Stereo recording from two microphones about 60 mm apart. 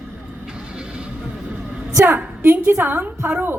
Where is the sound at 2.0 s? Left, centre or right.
Right.